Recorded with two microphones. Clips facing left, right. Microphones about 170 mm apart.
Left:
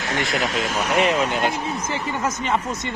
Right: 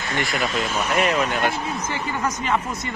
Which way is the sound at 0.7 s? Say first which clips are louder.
Left 2 dB; 10° left (ahead or behind).